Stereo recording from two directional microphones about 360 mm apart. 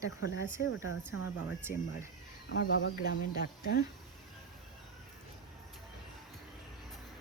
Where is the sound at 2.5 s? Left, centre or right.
Left.